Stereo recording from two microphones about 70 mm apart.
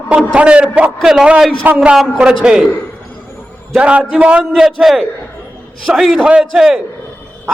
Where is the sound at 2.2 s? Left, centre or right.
Centre.